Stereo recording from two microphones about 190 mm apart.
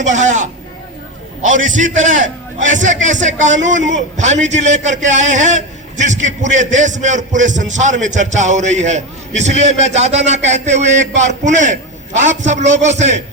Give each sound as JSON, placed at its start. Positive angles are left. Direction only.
{"t": 0.0, "sound": "a man's voice", "side_deg": -40}
{"t": 2.2, "sound": "a man's voice", "side_deg": -80}
{"t": 2.7, "sound": "a man's voice", "side_deg": -40}